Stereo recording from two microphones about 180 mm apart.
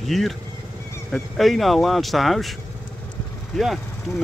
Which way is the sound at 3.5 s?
Centre (ahead or behind).